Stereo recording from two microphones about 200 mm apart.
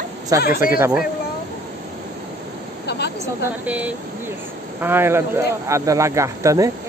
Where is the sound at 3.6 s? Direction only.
5° right (ahead or behind).